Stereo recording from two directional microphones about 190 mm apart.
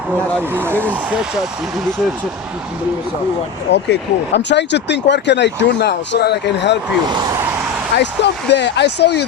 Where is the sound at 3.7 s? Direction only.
65° left (ahead or behind).